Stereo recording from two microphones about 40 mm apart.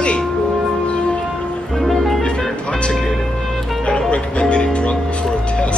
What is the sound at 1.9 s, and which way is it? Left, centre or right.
Music, centre.